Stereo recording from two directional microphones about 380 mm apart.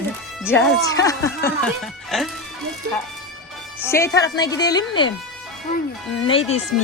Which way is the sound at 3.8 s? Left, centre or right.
Centre.